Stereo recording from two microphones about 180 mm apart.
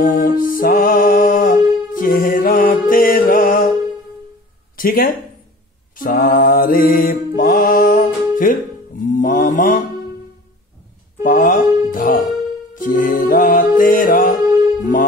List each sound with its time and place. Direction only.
0.0 s music: 50° left (ahead or behind)
4.7 s speech: 50° left (ahead or behind)
5.9 s mantra: 50° left (ahead or behind)
11.2 s music: 45° left (ahead or behind)